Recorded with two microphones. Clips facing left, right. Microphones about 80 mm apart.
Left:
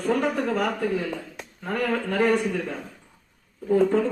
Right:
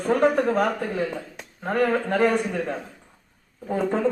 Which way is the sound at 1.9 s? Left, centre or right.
Right.